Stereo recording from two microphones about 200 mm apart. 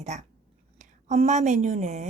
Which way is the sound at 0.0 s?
35° right (ahead or behind).